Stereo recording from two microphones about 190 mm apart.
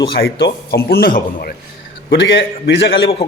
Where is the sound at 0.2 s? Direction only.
60° left (ahead or behind).